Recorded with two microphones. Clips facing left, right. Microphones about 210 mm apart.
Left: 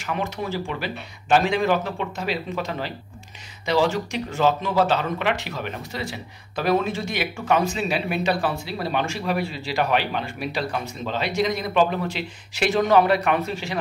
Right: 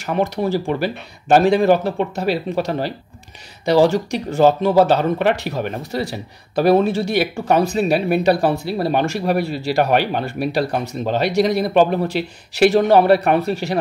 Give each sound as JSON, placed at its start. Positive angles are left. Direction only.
{"t": 0.0, "sound": "speech", "side_deg": -40}
{"t": 9.1, "sound": "speech", "side_deg": -60}